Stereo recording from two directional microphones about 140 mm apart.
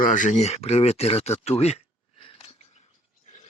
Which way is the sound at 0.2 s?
60° left (ahead or behind).